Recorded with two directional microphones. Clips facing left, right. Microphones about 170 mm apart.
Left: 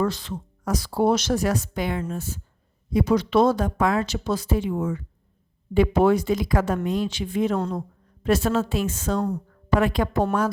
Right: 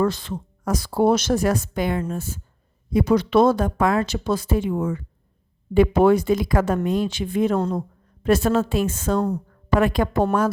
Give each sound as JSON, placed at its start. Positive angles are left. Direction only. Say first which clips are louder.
{"t": 0.0, "sound": "speech", "louder": "right 3 dB", "side_deg": -50}